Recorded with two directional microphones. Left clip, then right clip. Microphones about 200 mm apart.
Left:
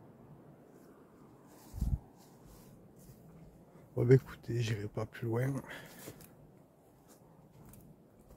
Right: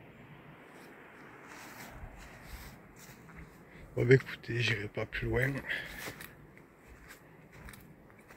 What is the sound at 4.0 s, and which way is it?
Speech, 20° left (ahead or behind).